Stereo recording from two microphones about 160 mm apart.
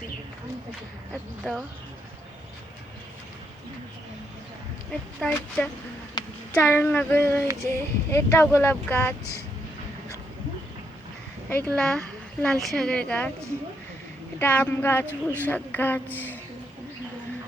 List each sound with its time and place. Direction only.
1.5 s speech: 5° left (ahead or behind)
4.9 s speech: 5° left (ahead or behind)
6.2 s a sound: 25° left (ahead or behind)
6.5 s speech: 15° left (ahead or behind)
11.4 s speech: 10° left (ahead or behind)
14.3 s speech: 10° left (ahead or behind)
15.0 s speech: 15° right (ahead or behind)
15.4 s speech: 10° left (ahead or behind)